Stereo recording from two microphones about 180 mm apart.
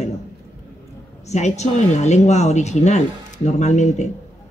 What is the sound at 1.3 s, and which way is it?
Speech, 40° left (ahead or behind).